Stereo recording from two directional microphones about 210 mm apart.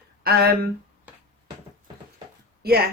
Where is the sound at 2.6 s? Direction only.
45° right (ahead or behind).